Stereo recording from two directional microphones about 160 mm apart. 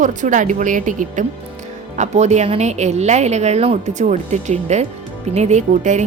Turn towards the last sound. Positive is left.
turn(degrees=-50)  # may be behind; listen again after turning